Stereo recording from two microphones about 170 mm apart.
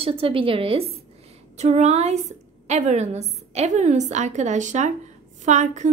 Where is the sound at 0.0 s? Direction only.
35° right (ahead or behind).